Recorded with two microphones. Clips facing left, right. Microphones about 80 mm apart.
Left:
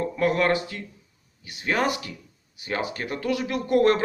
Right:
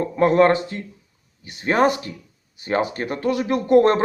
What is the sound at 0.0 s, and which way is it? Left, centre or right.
A man's voice, right.